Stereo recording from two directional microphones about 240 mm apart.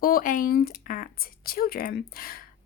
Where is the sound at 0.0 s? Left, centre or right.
Left.